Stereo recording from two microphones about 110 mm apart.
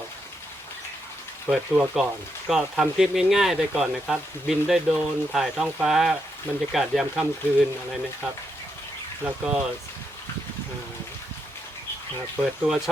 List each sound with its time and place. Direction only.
1.5 s speech: 10° right (ahead or behind)
9.2 s speech: 10° right (ahead or behind)
12.4 s speech: 5° right (ahead or behind)